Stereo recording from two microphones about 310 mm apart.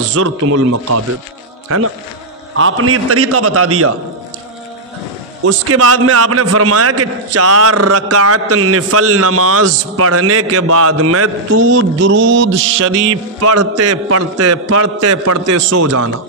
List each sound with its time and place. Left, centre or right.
0.1 s a man's voice: right
2.5 s a man's voice: right
5.4 s a man's voice: right
12.0 s mantra: right
13.4 s a man's voice: right